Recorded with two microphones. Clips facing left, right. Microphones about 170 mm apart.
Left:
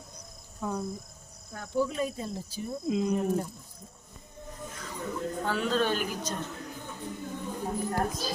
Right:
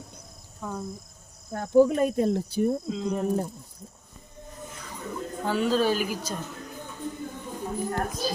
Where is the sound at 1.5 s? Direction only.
50° right (ahead or behind).